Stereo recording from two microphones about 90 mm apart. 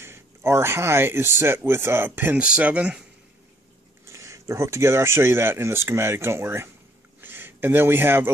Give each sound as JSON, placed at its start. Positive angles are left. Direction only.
{"t": 0.0, "sound": "speech", "side_deg": -30}
{"t": 4.0, "sound": "speech", "side_deg": -35}
{"t": 7.2, "sound": "a sound", "side_deg": -25}